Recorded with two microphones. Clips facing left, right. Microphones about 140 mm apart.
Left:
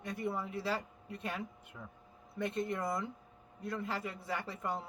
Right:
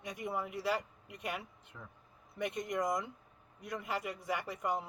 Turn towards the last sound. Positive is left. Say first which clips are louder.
# right 2 dB
turn(degrees=-15)  # may be behind; listen again after turning